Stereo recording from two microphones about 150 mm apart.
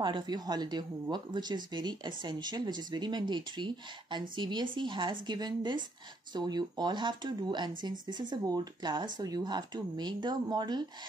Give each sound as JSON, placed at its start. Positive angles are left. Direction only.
{"t": 0.0, "sound": "speech", "side_deg": -30}